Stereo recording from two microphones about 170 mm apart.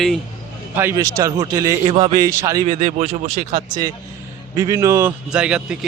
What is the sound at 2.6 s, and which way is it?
Speech, 45° right (ahead or behind).